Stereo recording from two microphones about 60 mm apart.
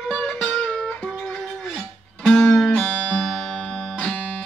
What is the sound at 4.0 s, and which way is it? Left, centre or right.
Music, left.